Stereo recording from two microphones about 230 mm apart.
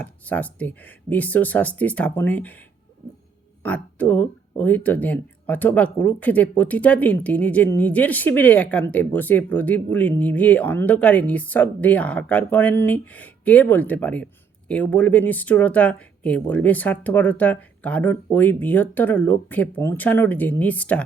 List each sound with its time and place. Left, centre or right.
0.0 s speech: centre